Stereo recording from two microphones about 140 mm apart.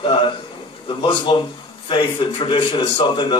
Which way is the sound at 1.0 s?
40° left (ahead or behind).